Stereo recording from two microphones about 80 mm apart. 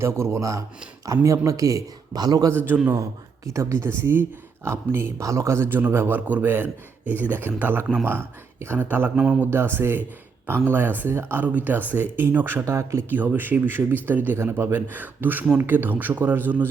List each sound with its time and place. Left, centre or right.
0.0 s speech: right
2.6 s a man's voice: right
3.4 s a man's voice: right
9.1 s speech: centre
9.4 s a man's voice: right
12.6 s speech: right
13.1 s a man's voice: right